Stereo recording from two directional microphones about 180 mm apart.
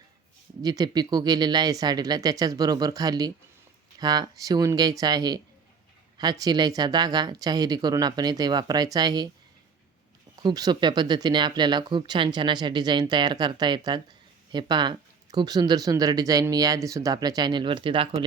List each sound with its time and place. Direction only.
0.6 s speech: 20° right (ahead or behind)
10.3 s speech: 20° right (ahead or behind)